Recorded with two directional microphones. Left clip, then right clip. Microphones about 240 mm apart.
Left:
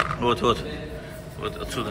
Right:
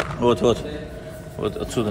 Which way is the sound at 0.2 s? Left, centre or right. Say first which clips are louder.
Right 7 dB; centre.